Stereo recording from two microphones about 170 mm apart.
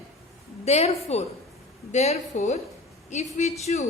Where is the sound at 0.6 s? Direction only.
40° left (ahead or behind).